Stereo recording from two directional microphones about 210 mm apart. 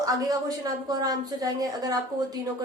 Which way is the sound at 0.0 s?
15° right (ahead or behind).